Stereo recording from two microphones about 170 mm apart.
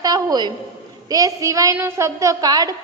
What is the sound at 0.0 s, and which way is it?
A woman's voice, 20° right (ahead or behind).